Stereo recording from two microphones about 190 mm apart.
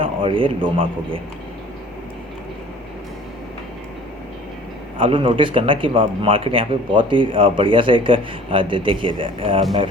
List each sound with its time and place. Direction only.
0.0 s a man's voice: 30° right (ahead or behind)
4.9 s speech: 25° right (ahead or behind)